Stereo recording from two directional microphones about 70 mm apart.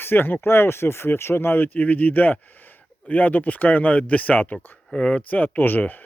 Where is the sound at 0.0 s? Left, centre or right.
Left.